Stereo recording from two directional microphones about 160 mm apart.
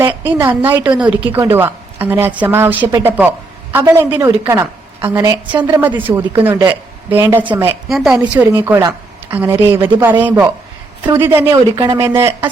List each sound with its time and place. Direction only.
0.0 s a woman's voice: 15° right (ahead or behind)